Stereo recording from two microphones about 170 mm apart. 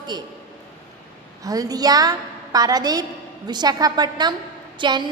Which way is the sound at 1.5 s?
20° right (ahead or behind).